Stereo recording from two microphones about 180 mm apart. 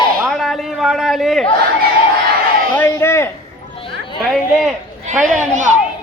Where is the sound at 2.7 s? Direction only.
15° left (ahead or behind).